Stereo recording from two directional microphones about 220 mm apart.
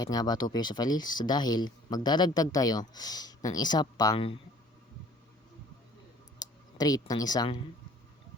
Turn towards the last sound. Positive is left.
turn(degrees=15)  # may be behind; listen again after turning